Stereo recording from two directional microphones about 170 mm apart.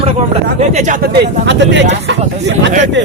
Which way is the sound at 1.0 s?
90° right.